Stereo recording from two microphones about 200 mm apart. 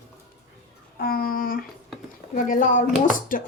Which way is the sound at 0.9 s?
50° left (ahead or behind).